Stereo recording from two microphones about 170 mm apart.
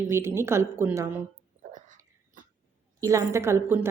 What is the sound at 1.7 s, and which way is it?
Cough, 50° right (ahead or behind).